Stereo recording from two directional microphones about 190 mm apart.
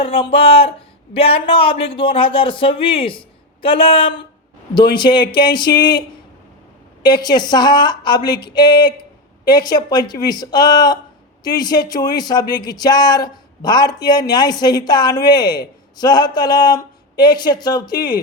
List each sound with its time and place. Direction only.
0.0 s speech: 30° left (ahead or behind)